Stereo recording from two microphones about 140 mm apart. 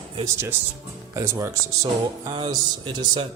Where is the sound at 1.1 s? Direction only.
25° right (ahead or behind).